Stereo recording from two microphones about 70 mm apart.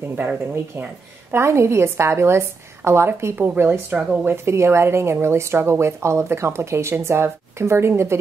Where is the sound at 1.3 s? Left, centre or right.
Right.